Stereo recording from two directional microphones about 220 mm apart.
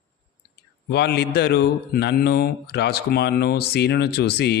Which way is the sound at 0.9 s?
50° left (ahead or behind).